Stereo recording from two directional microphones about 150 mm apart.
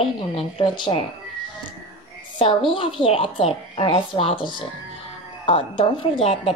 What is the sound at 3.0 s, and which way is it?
Speech, 40° left (ahead or behind).